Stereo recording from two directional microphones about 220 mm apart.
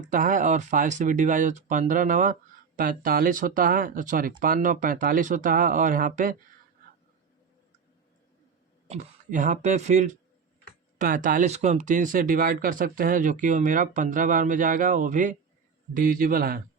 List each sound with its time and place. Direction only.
0.1 s speech: 35° right (ahead or behind)
8.9 s speech: 35° right (ahead or behind)